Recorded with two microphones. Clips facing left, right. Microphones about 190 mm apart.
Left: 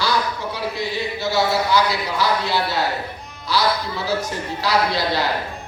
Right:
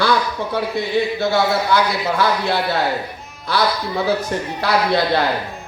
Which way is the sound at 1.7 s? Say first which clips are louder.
Right 2 dB; 55° right (ahead or behind).